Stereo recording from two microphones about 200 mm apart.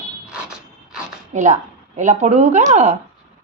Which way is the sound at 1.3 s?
35° right (ahead or behind).